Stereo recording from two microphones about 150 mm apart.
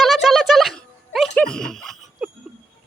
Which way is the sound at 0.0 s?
Centre (ahead or behind).